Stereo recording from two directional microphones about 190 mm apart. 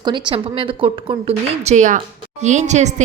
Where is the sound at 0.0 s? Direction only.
25° right (ahead or behind).